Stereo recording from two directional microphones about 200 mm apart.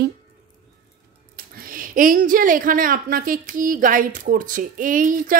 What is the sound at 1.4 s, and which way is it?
Speech, 45° right (ahead or behind).